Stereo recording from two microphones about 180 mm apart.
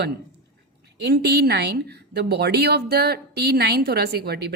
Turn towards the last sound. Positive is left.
turn(degrees=-60)  # may be behind; listen again after turning